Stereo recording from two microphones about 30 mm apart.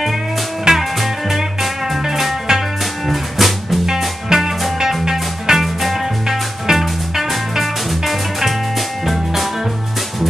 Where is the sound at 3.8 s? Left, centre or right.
Centre.